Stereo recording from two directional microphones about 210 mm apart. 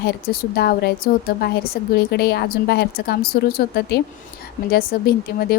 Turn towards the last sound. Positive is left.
turn(degrees=45)  # may be behind; listen again after turning